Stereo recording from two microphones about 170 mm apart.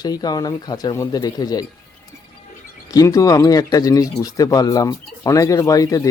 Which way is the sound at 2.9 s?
20° left (ahead or behind).